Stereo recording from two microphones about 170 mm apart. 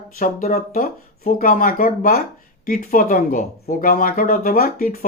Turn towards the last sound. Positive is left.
turn(degrees=60)  # may be behind; listen again after turning